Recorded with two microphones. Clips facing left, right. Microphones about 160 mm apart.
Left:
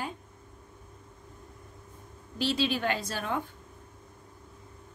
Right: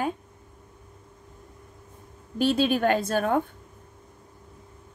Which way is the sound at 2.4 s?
50° right (ahead or behind).